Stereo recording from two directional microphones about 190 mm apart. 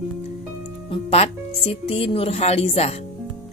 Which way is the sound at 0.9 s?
35° left (ahead or behind).